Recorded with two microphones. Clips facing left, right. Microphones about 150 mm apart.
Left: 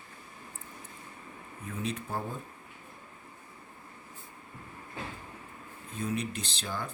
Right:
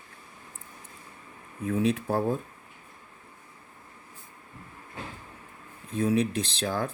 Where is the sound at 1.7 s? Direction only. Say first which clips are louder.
Right 10 dB; 85° right.